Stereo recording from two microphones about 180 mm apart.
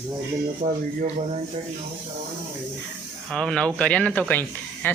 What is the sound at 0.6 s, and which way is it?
Speech, 45° right (ahead or behind).